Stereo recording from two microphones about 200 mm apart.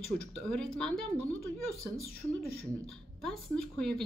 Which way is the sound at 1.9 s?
50° left (ahead or behind).